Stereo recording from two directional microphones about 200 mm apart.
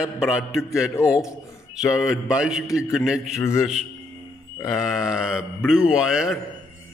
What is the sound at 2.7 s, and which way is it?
Speech, 15° left (ahead or behind).